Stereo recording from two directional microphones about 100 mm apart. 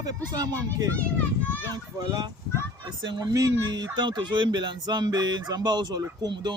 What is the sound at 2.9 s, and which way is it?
Speech, 45° right (ahead or behind).